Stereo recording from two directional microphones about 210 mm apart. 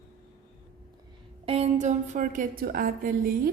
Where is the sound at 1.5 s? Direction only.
30° right (ahead or behind).